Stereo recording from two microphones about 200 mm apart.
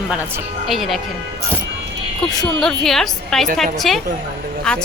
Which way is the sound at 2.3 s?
Centre (ahead or behind).